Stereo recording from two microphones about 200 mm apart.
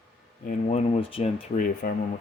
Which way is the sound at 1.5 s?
40° left (ahead or behind).